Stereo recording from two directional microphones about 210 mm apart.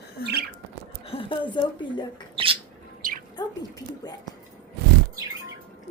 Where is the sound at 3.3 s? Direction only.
20° left (ahead or behind).